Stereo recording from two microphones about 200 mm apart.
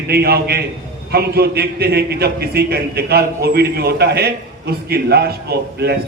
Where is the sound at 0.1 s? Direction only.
50° right (ahead or behind).